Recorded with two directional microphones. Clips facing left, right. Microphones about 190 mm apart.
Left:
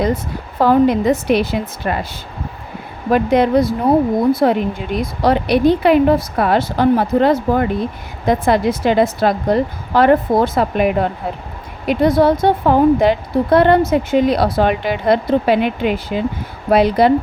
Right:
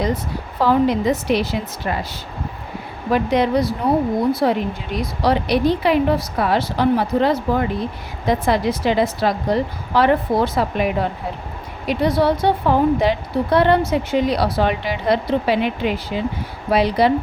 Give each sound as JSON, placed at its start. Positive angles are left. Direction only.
{"t": 0.6, "sound": "speech", "side_deg": 50}
{"t": 3.1, "sound": "speech", "side_deg": 50}